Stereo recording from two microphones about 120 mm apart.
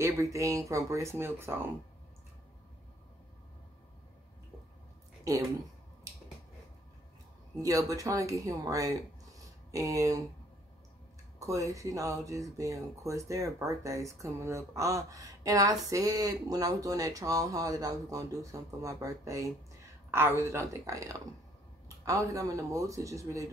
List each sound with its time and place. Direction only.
0.0 s speech: 25° right (ahead or behind)
7.6 s speech: 30° right (ahead or behind)
11.3 s speech: 25° right (ahead or behind)